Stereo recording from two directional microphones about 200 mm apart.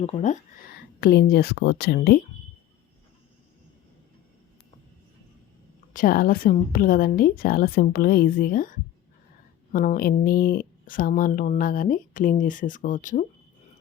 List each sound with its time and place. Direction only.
0.0 s speech: 35° left (ahead or behind)
1.0 s speech: 50° left (ahead or behind)
5.9 s speech: 45° left (ahead or behind)